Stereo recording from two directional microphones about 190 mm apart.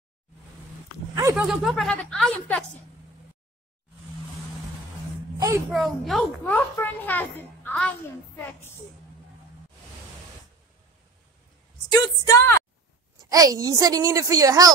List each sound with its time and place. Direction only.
1.3 s speech: centre (ahead or behind)
5.7 s a child's voice: centre (ahead or behind)
11.9 s a child's voice: 15° left (ahead or behind)
13.2 s a woman's voice: 20° right (ahead or behind)